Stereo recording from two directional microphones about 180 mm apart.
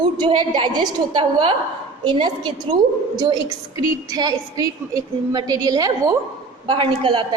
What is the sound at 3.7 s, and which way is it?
A woman's voice, 20° right (ahead or behind).